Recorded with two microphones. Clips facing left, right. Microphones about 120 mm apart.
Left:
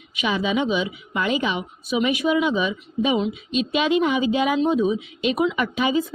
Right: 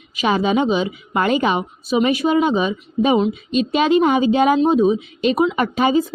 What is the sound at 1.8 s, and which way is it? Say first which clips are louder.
Speech: right 4 dB; 35° right (ahead or behind).